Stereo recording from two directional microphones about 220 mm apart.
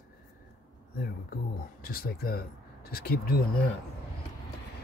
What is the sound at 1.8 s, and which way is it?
Speech, 45° left (ahead or behind).